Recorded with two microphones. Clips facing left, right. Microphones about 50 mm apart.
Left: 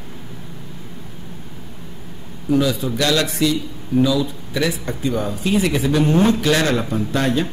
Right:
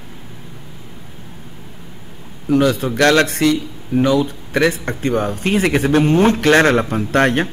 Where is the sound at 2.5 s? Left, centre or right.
Right.